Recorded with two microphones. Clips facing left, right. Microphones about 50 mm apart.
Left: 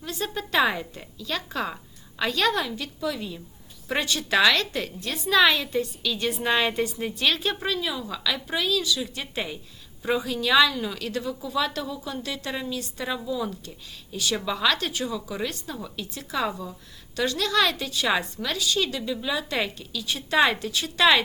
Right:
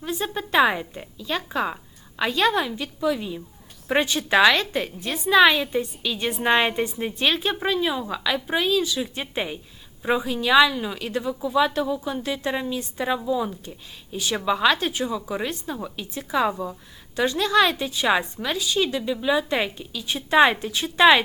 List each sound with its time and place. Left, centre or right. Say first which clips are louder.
0.0 s a woman's voice: right 3 dB; centre